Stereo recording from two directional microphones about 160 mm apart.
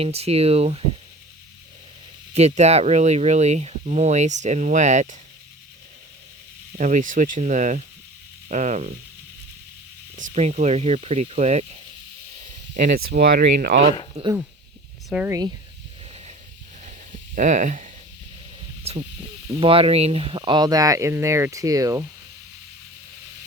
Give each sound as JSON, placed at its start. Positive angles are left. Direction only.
{"t": 0.0, "sound": "speech", "side_deg": -40}
{"t": 2.3, "sound": "speech", "side_deg": -40}
{"t": 6.7, "sound": "speech", "side_deg": -50}
{"t": 10.2, "sound": "speech", "side_deg": -50}
{"t": 15.1, "sound": "speech", "side_deg": -5}
{"t": 16.8, "sound": "a sound", "side_deg": -50}
{"t": 18.8, "sound": "snake", "side_deg": -40}
{"t": 19.5, "sound": "speech", "side_deg": -35}